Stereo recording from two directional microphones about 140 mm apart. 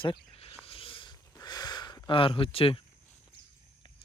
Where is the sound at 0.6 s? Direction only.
40° left (ahead or behind).